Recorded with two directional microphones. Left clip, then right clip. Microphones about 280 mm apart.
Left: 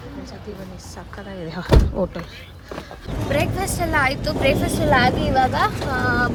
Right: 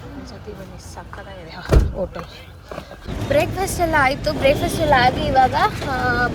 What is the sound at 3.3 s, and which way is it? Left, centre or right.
Speech, centre.